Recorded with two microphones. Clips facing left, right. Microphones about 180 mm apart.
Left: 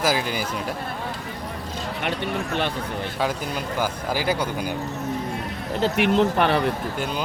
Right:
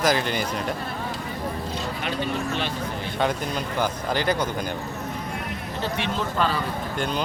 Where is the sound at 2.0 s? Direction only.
60° left (ahead or behind).